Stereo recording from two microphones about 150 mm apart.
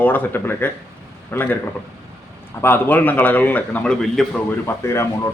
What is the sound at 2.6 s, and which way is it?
Speech, 15° left (ahead or behind).